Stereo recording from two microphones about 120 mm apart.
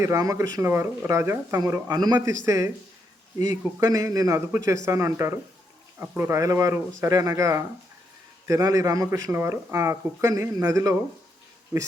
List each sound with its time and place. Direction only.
0.0 s speech: 25° right (ahead or behind)
1.9 s a man's voice: 35° right (ahead or behind)
2.1 s speech: 20° right (ahead or behind)
3.8 s speech: 30° right (ahead or behind)